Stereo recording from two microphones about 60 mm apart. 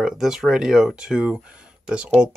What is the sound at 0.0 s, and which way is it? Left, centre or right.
Speech, centre.